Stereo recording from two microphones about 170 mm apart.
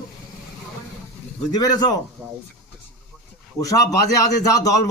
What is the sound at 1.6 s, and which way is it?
Speech, 25° left (ahead or behind).